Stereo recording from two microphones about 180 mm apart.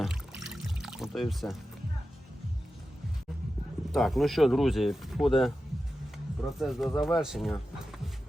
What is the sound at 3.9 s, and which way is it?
Speech, centre (ahead or behind).